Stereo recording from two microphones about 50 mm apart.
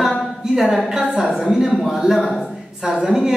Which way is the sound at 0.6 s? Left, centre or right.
Centre.